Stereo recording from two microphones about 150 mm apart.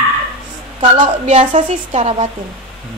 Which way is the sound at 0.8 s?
40° right (ahead or behind).